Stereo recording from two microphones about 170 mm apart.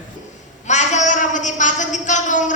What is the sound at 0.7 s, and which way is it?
A woman's voice, 45° left (ahead or behind).